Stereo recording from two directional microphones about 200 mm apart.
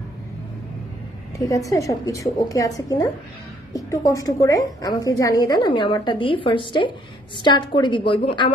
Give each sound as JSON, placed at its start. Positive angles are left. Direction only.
{"t": 1.4, "sound": "a woman's voice", "side_deg": 15}